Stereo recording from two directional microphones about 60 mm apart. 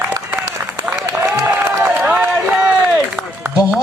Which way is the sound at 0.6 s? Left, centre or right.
Right.